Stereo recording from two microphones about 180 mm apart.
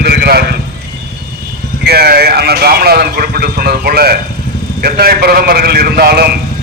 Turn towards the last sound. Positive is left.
turn(degrees=-60)  # may be behind; listen again after turning